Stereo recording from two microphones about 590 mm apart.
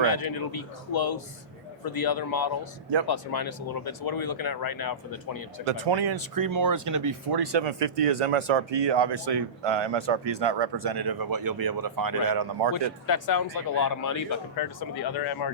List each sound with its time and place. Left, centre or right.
0.0 s speech: left
5.6 s speech: right
7.8 s speech: right
12.7 s speech: left